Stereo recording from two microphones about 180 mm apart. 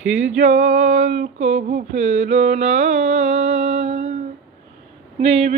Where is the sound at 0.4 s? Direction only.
45° right (ahead or behind).